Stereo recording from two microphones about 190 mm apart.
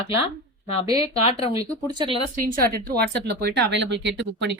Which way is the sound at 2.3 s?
45° right (ahead or behind).